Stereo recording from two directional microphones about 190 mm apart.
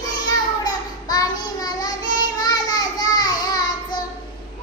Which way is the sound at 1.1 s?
20° left (ahead or behind).